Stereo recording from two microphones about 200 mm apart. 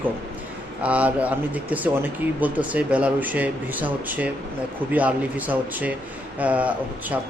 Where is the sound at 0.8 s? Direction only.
5° right (ahead or behind).